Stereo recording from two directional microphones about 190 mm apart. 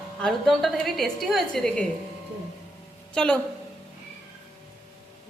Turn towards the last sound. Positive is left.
turn(degrees=5)  # may be behind; listen again after turning